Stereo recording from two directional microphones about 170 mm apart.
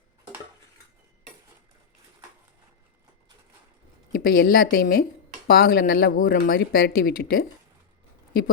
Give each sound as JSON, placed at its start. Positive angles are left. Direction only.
{"t": 4.1, "sound": "speech", "side_deg": 60}